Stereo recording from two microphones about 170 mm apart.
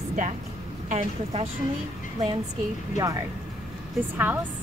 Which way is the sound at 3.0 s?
20° right (ahead or behind).